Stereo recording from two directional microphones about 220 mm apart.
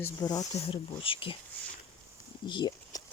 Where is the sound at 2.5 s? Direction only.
20° left (ahead or behind).